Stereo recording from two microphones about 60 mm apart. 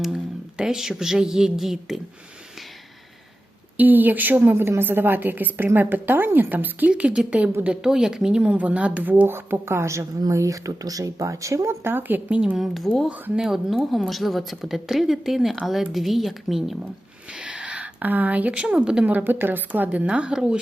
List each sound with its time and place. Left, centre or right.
0.0 s speech: centre
3.8 s a woman's voice: right
9.2 s speech: right
10.2 s speech: right
11.6 s a woman's voice: right
12.5 s a woman's voice: centre
13.1 s a woman's voice: right
13.4 s a woman's voice: centre
17.3 s a sound: centre
19.0 s a woman's voice: right; by 20.6 s centre